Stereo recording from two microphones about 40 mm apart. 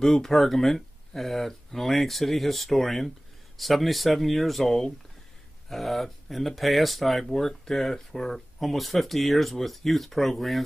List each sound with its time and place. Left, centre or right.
0.0 s speech: centre